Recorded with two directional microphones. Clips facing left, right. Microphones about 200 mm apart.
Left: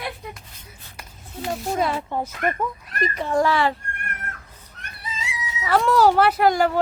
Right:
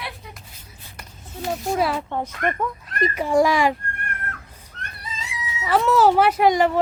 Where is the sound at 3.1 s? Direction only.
10° right (ahead or behind).